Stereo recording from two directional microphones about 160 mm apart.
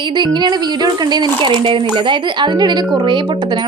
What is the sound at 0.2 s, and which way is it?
Speech, 30° right (ahead or behind).